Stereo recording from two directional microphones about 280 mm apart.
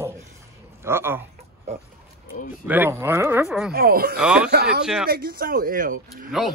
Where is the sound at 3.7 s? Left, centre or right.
Right.